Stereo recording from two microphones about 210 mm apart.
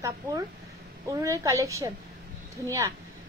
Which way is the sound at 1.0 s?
15° right (ahead or behind).